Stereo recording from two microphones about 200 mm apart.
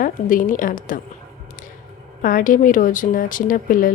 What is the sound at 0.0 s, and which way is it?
Speech, 40° left (ahead or behind).